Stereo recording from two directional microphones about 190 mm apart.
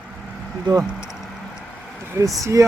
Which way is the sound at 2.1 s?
15° right (ahead or behind).